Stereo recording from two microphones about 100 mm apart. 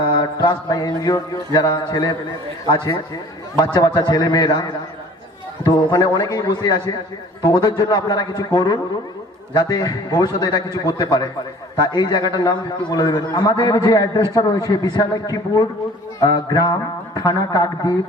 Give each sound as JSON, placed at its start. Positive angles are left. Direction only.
{"t": 0.0, "sound": "mantra", "side_deg": 50}
{"t": 0.7, "sound": "a man's voice", "side_deg": 40}
{"t": 3.6, "sound": "a man's voice", "side_deg": 40}